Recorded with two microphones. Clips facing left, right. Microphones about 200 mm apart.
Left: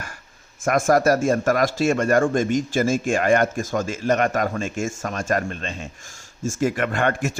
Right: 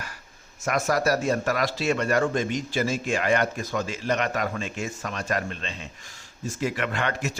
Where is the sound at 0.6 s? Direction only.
50° left (ahead or behind).